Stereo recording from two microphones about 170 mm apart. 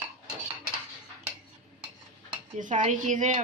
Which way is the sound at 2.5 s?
50° right (ahead or behind).